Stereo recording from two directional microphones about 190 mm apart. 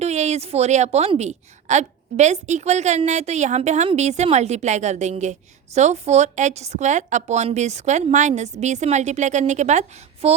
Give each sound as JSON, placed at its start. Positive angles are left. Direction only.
{"t": 0.0, "sound": "a woman's voice", "side_deg": -35}